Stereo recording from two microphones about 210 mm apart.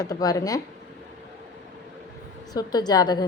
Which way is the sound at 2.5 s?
20° left (ahead or behind).